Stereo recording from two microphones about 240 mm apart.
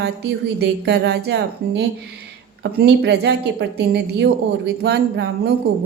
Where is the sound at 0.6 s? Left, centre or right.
Right.